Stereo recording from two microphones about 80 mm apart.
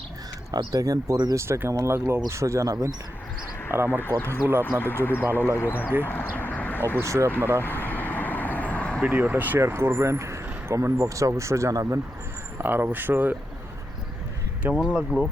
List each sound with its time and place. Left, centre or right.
0.7 s speech: right
1.1 s speech: right
1.4 s speech: right
3.7 s speech: right
4.0 s speech: left
4.7 s speech: right
5.5 s speech: left
6.0 s a sound: left
7.0 s speech: right
7.6 s vehicle: left
9.0 s speech: right
12.5 s speech: right
14.6 s speech: centre